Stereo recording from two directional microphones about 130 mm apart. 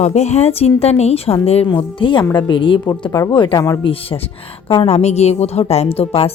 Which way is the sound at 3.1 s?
25° left (ahead or behind).